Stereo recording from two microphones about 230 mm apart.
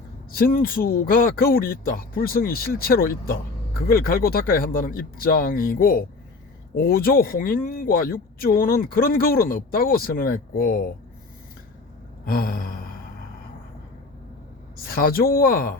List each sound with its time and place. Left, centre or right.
0.3 s speech: left
12.2 s a sound: left
14.8 s speech: left